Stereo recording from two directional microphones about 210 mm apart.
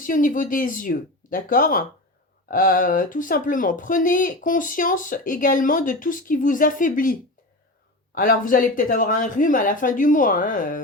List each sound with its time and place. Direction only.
0.0 s speech: 40° left (ahead or behind)